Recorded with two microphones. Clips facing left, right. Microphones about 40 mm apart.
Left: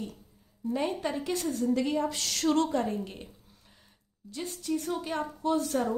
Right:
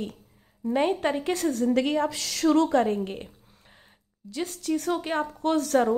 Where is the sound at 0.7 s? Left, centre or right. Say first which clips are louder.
Right 7 dB; right.